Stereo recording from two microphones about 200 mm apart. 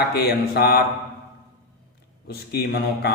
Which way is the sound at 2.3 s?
50° left (ahead or behind).